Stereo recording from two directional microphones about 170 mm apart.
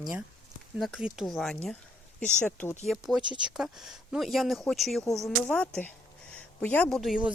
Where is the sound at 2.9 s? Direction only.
Centre (ahead or behind).